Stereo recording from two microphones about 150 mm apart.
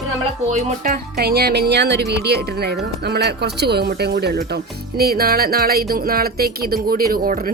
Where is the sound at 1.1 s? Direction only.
90° right.